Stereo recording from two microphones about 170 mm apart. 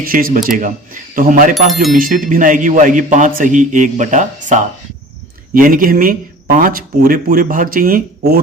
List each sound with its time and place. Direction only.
0.0 s a man's voice: 60° right (ahead or behind)
1.6 s speech: centre (ahead or behind)
2.0 s a man's voice: 55° right (ahead or behind)
5.5 s speech: 55° right (ahead or behind)